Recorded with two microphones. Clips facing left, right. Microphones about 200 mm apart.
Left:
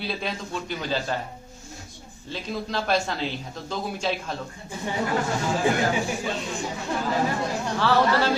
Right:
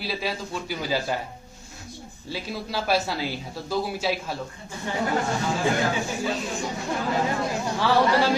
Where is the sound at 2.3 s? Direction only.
5° right (ahead or behind).